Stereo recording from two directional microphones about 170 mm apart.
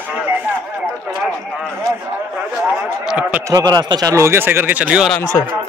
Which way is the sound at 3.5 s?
25° right (ahead or behind).